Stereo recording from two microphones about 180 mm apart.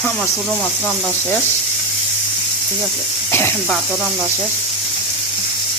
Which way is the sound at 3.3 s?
15° left (ahead or behind).